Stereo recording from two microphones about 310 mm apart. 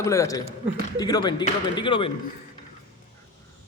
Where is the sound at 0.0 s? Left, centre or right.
Centre.